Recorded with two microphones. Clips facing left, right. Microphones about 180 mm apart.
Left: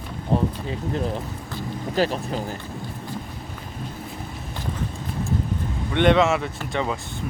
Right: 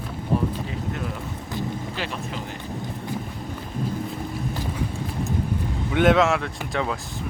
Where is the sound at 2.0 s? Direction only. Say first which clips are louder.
Left 8 dB; 40° left (ahead or behind).